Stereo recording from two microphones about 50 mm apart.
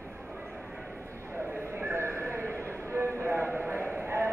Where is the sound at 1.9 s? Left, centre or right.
Right.